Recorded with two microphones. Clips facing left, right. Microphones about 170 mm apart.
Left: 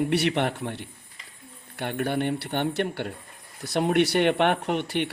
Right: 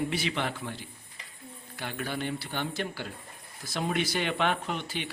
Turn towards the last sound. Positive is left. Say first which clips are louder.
# left 8 dB
turn(degrees=65)  # may be behind; listen again after turning